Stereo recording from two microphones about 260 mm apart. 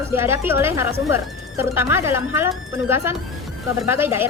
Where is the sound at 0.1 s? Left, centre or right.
Centre.